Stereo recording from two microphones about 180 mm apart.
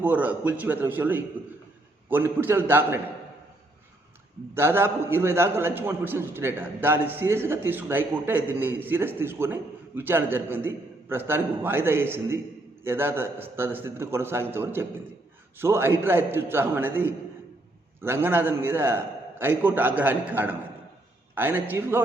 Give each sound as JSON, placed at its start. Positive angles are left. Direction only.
{"t": 0.0, "sound": "a man's voice", "side_deg": -10}
{"t": 4.5, "sound": "a man's voice", "side_deg": -15}